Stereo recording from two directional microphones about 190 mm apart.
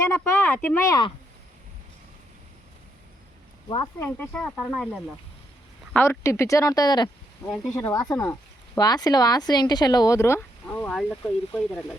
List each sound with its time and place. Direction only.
0.1 s speech: 15° left (ahead or behind)
3.7 s speech: 25° left (ahead or behind)
4.0 s speech: 10° left (ahead or behind)
5.9 s speech: 10° left (ahead or behind)
7.4 s speech: centre (ahead or behind)
7.7 s speech: 15° left (ahead or behind)